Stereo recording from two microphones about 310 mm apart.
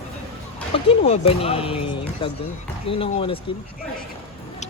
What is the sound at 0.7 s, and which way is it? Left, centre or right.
Speech, centre.